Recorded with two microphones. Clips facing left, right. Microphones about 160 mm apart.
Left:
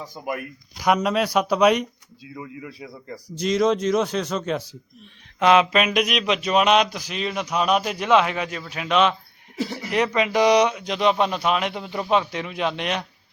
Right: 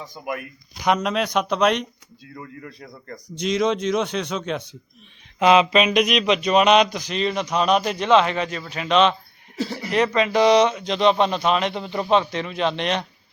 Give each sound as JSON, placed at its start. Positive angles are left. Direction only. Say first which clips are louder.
{"t": 0.8, "sound": "speech", "louder": "left 1 dB", "side_deg": 5}